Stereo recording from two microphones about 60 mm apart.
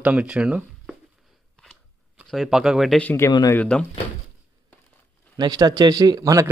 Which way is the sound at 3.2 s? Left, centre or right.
Left.